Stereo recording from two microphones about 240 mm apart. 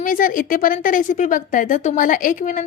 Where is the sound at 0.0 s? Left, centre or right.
Left.